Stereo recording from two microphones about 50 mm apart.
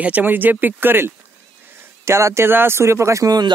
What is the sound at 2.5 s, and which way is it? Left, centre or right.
Speech, right.